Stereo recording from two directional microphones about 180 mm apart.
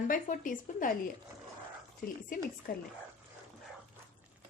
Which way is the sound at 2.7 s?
50° left (ahead or behind).